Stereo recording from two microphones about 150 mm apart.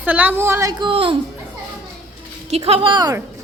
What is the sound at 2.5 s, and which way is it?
Speech, 40° right (ahead or behind).